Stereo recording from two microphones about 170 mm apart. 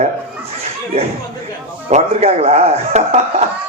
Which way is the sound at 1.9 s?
40° right (ahead or behind).